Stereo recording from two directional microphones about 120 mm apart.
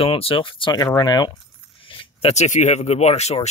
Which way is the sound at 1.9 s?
45° left (ahead or behind).